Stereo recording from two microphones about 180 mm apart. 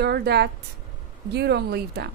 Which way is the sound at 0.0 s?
65° right (ahead or behind).